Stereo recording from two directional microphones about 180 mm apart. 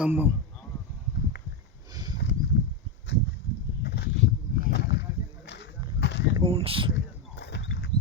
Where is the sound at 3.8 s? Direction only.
65° left (ahead or behind).